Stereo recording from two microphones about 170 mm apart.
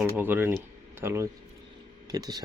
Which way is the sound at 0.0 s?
10° right (ahead or behind).